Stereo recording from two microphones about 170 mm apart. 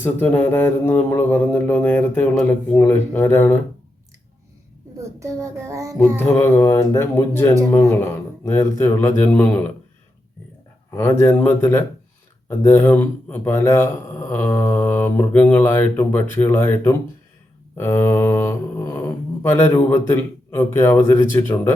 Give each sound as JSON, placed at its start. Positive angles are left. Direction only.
{"t": 0.0, "sound": "a man's voice", "side_deg": 10}
{"t": 4.9, "sound": "child singing", "side_deg": -15}
{"t": 6.1, "sound": "a man's voice", "side_deg": 15}
{"t": 10.9, "sound": "a man's voice", "side_deg": 15}
{"t": 17.7, "sound": "mantra", "side_deg": 15}
{"t": 19.4, "sound": "a man's voice", "side_deg": 15}